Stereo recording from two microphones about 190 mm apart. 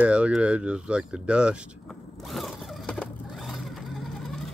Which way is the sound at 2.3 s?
Centre (ahead or behind).